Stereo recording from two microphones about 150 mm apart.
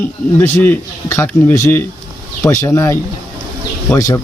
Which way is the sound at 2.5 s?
20° left (ahead or behind).